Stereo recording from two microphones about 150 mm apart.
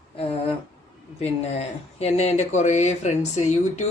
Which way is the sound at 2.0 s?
45° left (ahead or behind).